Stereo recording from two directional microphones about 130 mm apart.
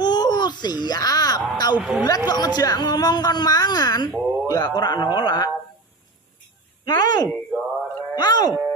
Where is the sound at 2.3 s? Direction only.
30° left (ahead or behind).